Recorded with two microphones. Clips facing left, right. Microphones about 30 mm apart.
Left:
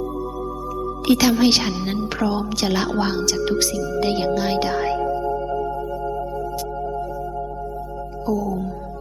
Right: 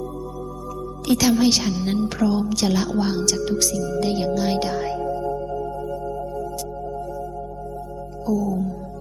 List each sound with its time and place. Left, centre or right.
1.0 s a woman's voice: left
1.8 s music: centre
2.2 s a woman's voice: left
2.7 s speech: left
3.2 s music: centre
3.4 s a woman's voice: left
3.8 s music: centre
4.0 s speech: left
5.1 s music: centre
8.3 s music: centre